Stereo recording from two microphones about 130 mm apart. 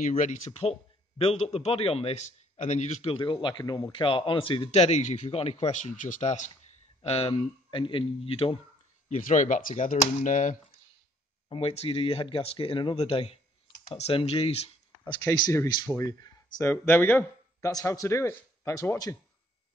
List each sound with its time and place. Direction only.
0.5 s a man's voice: 50° left (ahead or behind)
4.6 s speech: 55° left (ahead or behind)
7.0 s a man's voice: 50° left (ahead or behind)
9.1 s speech: 70° left (ahead or behind)
11.4 s a man's voice: 45° left (ahead or behind)
16.0 s speech: 30° left (ahead or behind)
16.7 s speech: 15° left (ahead or behind)
17.6 s a man's voice: 25° left (ahead or behind)